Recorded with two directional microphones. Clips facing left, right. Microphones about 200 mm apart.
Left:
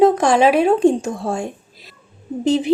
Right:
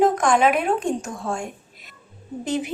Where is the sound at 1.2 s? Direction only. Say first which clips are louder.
Left 5 dB; 35° left (ahead or behind).